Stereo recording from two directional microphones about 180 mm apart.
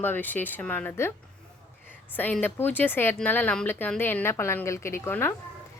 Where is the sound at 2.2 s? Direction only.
10° left (ahead or behind).